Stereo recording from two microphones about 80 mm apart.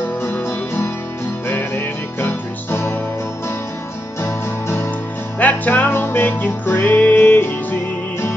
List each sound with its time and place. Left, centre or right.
0.3 s music: left
4.2 s music: left